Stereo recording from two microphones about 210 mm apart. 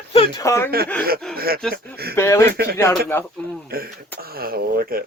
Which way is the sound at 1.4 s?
45° right (ahead or behind).